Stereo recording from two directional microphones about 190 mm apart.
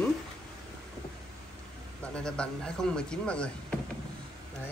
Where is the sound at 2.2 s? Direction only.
5° left (ahead or behind).